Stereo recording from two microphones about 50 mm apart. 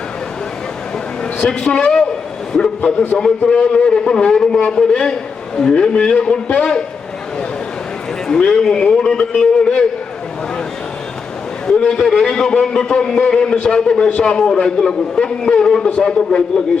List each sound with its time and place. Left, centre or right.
1.4 s a man's voice: centre
8.3 s a man's voice: centre
11.8 s a man's voice: centre